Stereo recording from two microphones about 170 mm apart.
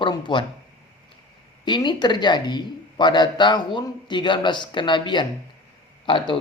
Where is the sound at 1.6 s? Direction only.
25° left (ahead or behind).